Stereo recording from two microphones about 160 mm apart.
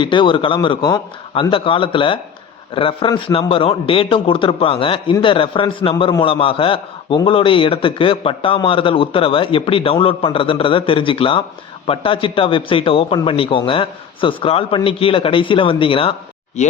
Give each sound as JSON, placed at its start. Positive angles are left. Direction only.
{"t": 0.0, "sound": "a man's voice", "side_deg": 30}